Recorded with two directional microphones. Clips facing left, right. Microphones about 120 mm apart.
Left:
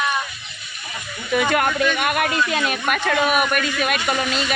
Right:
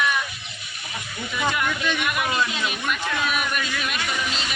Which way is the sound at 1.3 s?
65° left (ahead or behind).